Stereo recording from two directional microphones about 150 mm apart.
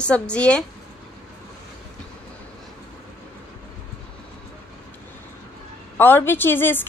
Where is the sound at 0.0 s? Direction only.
5° left (ahead or behind).